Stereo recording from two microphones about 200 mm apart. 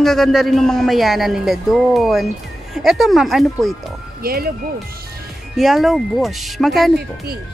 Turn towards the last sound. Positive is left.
turn(degrees=0)  # may be behind; listen again after turning